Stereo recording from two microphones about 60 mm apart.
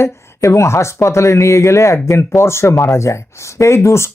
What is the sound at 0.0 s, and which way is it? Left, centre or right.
Speech, left.